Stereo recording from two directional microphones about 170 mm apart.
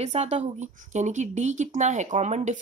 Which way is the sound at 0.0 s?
40° right (ahead or behind).